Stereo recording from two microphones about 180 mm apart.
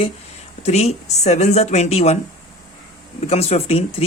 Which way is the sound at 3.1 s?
35° left (ahead or behind).